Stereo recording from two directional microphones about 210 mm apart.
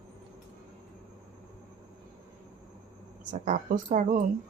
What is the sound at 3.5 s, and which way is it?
Speech, 40° right (ahead or behind).